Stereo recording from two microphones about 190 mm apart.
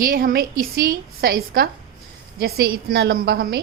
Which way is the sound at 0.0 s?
45° right (ahead or behind).